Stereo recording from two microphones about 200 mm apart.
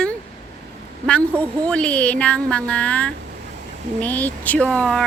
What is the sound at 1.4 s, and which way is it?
Speech, 5° left (ahead or behind).